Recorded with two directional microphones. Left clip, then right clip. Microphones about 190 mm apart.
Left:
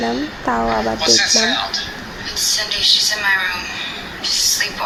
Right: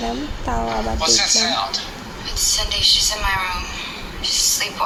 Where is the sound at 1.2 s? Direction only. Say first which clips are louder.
Left 2 dB; 20° right (ahead or behind).